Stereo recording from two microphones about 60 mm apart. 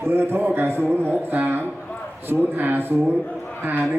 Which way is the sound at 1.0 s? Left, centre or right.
Right.